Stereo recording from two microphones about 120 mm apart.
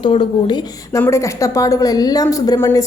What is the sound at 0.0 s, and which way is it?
Speech, 45° left (ahead or behind).